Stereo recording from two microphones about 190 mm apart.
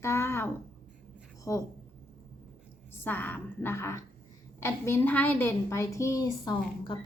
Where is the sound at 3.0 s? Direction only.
10° left (ahead or behind).